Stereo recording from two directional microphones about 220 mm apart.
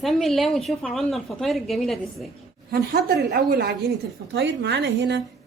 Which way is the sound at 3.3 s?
45° right (ahead or behind).